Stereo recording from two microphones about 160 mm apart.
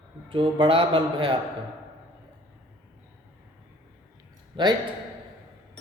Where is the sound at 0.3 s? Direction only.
30° right (ahead or behind).